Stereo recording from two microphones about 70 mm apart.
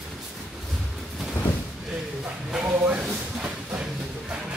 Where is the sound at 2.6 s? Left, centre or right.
Right.